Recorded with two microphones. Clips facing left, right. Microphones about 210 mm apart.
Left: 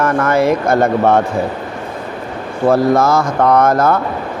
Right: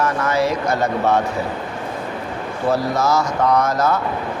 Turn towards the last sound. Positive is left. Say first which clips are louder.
# left 6 dB
turn(degrees=55)  # may be behind; listen again after turning